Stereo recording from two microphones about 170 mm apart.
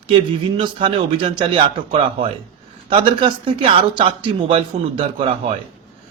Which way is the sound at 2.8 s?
30° right (ahead or behind).